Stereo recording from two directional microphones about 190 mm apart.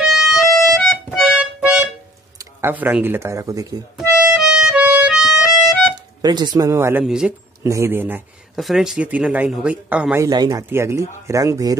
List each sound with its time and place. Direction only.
0.0 s music: centre (ahead or behind)
2.3 s speech: 10° right (ahead or behind)
4.3 s music: 5° right (ahead or behind)
6.2 s speech: 20° right (ahead or behind)
10.2 s speech: 20° right (ahead or behind)